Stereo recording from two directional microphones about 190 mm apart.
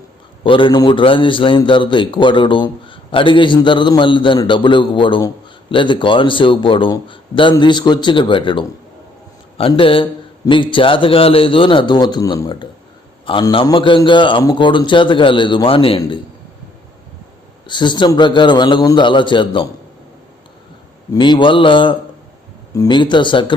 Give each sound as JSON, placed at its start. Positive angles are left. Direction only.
{"t": 0.4, "sound": "a man's voice", "side_deg": 25}
{"t": 17.7, "sound": "a man's voice", "side_deg": 25}
{"t": 21.1, "sound": "a man's voice", "side_deg": 25}